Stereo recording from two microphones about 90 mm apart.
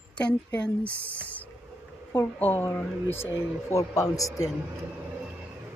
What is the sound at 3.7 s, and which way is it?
Speech, 35° left (ahead or behind).